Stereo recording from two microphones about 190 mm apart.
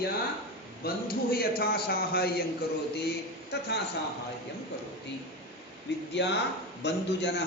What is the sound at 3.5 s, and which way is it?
Speech, 60° left (ahead or behind).